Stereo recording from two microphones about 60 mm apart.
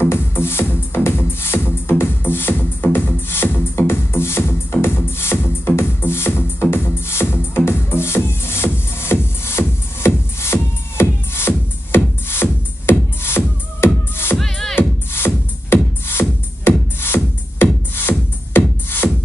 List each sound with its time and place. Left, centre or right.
0.1 s music: left
14.4 s music: centre
14.8 s music: left
19.0 s music: centre